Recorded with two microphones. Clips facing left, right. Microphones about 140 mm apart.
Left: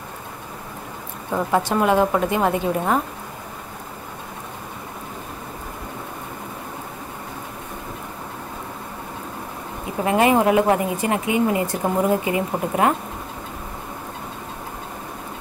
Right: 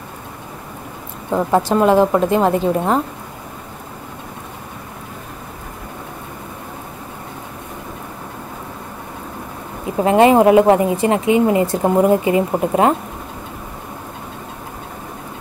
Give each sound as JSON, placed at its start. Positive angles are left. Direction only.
{"t": 1.3, "sound": "a woman's voice", "side_deg": -25}
{"t": 10.0, "sound": "a woman's voice", "side_deg": -30}